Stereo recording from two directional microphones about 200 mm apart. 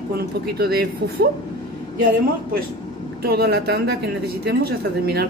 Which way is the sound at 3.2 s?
55° right (ahead or behind).